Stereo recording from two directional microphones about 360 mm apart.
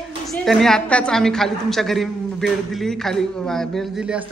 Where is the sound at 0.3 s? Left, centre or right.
Centre.